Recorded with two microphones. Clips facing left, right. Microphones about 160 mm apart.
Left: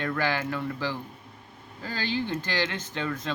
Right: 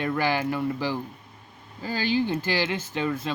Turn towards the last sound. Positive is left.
turn(degrees=-10)  # may be behind; listen again after turning